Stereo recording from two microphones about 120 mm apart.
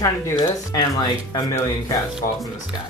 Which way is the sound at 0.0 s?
25° left (ahead or behind).